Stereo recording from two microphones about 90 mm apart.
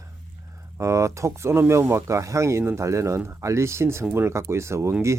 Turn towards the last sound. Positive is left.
turn(degrees=-30)  # may be behind; listen again after turning